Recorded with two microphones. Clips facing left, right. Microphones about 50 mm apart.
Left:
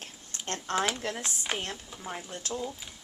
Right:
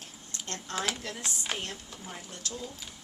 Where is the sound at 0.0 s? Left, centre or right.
Left.